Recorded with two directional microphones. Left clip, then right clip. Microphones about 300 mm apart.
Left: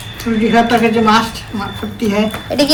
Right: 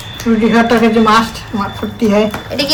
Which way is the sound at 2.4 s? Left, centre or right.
Centre.